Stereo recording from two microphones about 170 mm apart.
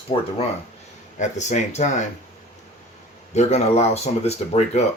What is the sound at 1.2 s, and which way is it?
Speech, 45° left (ahead or behind).